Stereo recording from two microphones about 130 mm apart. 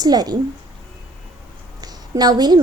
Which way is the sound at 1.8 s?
30° right (ahead or behind).